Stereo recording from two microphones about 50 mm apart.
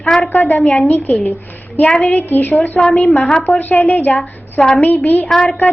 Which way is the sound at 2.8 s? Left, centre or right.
Centre.